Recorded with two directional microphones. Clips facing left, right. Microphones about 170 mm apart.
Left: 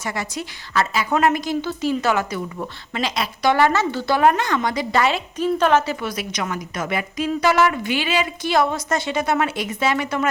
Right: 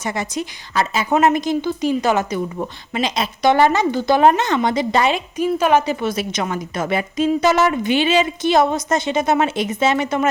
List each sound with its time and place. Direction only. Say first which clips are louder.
0.0 s a woman's voice: right 4 dB; 20° right (ahead or behind)